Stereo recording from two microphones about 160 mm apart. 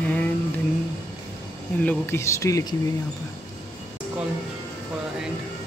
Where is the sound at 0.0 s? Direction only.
10° left (ahead or behind).